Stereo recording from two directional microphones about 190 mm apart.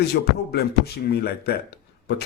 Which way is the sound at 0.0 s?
55° left (ahead or behind).